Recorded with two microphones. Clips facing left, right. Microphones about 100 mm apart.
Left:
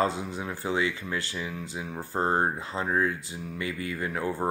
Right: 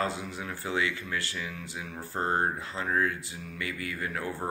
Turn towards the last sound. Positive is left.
turn(degrees=25)  # may be behind; listen again after turning